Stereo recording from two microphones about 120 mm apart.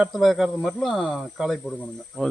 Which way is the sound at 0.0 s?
Centre (ahead or behind).